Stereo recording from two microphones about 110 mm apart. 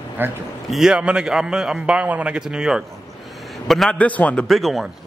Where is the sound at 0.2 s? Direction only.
20° right (ahead or behind).